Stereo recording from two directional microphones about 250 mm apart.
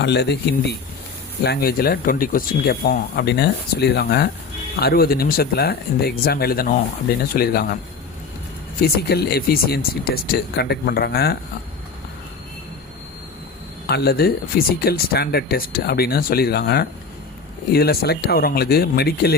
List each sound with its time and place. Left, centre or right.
0.0 s speech: left
8.8 s speech: left
13.8 s speech: left